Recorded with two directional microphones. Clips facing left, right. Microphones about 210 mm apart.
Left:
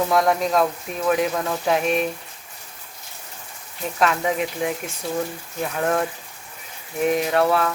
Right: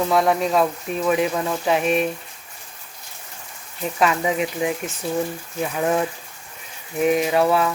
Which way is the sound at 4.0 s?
5° right (ahead or behind).